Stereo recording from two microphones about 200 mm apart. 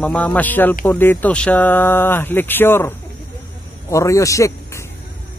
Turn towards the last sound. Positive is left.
turn(degrees=15)  # may be behind; listen again after turning